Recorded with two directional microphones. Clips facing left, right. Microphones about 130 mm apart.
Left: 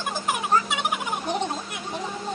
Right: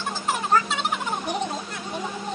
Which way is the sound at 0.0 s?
15° left (ahead or behind).